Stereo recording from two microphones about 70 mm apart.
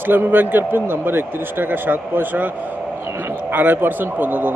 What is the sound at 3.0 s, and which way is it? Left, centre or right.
Speech, right.